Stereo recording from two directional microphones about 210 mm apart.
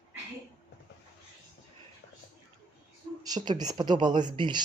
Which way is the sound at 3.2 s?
20° right (ahead or behind).